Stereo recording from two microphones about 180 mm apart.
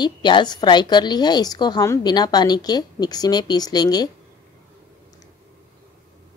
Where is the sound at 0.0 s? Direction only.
25° left (ahead or behind).